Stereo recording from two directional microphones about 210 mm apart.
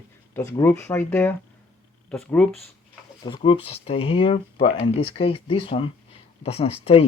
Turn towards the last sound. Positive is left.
turn(degrees=25)  # may be behind; listen again after turning